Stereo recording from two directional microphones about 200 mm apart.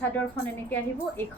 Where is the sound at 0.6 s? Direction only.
10° left (ahead or behind).